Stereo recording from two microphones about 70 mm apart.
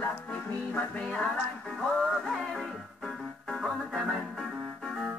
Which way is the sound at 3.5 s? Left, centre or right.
Centre.